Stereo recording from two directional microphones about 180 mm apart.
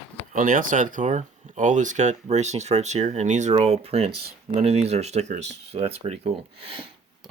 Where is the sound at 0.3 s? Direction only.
50° right (ahead or behind); by 6.7 s 35° right (ahead or behind).